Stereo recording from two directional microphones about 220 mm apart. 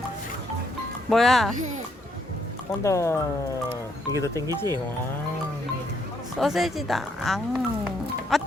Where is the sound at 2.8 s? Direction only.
15° left (ahead or behind).